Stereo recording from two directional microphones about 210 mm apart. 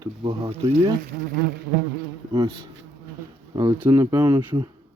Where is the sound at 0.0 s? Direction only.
20° right (ahead or behind).